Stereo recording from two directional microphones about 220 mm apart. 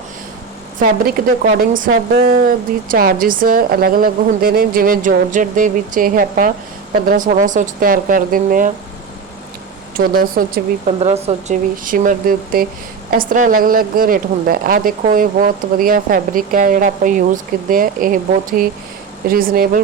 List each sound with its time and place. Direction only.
0.8 s a woman's voice: 40° right (ahead or behind)
10.3 s a woman's voice: 35° right (ahead or behind)